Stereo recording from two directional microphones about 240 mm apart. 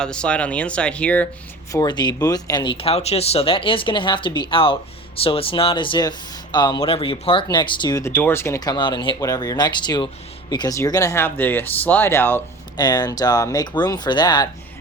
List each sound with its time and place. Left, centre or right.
0.0 s speech: centre
1.7 s speech: centre